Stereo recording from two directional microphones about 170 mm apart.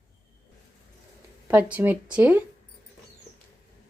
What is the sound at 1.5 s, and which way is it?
Speech, 10° right (ahead or behind).